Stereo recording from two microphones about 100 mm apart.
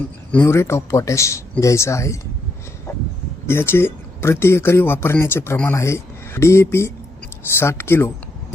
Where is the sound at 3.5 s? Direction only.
25° left (ahead or behind).